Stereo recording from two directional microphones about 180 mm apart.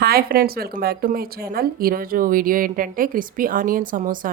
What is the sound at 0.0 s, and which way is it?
Speech, 60° right (ahead or behind).